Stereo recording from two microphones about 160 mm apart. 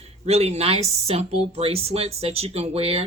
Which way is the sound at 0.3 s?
40° right (ahead or behind).